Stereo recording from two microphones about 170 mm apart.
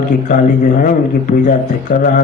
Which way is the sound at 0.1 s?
50° left (ahead or behind).